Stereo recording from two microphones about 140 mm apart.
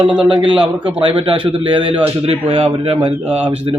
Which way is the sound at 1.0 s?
40° right (ahead or behind).